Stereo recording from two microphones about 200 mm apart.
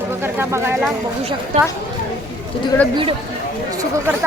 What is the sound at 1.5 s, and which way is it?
Speech, 35° right (ahead or behind).